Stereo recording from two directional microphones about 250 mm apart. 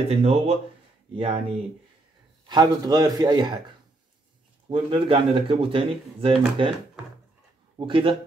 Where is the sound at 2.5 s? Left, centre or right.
Centre.